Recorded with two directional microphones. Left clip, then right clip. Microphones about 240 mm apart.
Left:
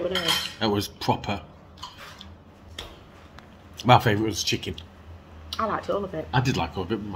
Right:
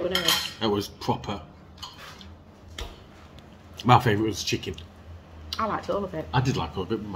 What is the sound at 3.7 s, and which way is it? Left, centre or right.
Speech, centre.